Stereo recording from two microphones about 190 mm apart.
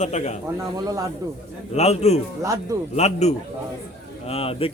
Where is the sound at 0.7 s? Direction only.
20° right (ahead or behind).